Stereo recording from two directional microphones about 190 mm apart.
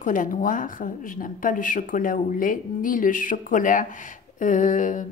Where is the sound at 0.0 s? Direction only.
45° left (ahead or behind).